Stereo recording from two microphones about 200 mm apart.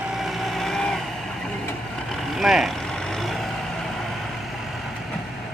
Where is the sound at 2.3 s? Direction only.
Centre (ahead or behind).